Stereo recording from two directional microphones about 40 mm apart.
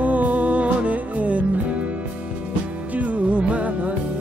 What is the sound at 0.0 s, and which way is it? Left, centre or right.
Music, right.